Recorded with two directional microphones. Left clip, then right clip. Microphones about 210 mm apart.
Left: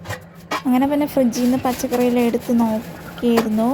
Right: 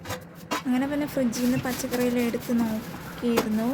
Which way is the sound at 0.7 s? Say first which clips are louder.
Left 10 dB; 25° left (ahead or behind).